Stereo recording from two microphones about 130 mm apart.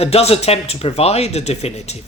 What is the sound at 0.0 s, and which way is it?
Speech, 50° left (ahead or behind).